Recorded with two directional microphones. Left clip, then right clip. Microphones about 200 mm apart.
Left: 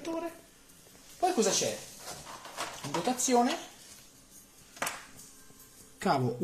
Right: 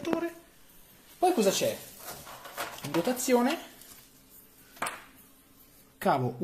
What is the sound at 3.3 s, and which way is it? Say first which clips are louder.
Speech: even; 30° right (ahead or behind).